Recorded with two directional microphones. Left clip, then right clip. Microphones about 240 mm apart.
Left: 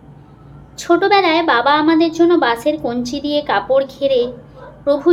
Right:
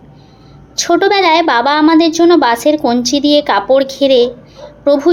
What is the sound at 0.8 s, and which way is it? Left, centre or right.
Speech, right.